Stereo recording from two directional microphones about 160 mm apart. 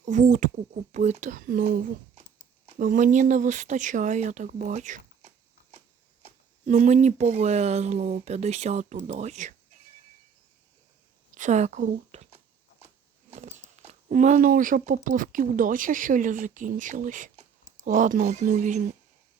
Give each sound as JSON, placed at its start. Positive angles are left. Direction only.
{"t": 0.0, "sound": "speech", "side_deg": -50}
{"t": 11.3, "sound": "speech", "side_deg": -50}